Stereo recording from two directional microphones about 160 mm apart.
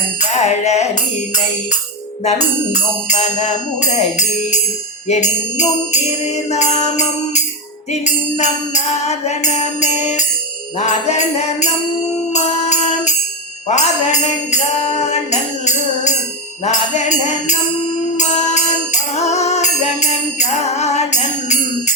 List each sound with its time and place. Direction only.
0.2 s music: 45° left (ahead or behind)
2.2 s music: 45° left (ahead or behind)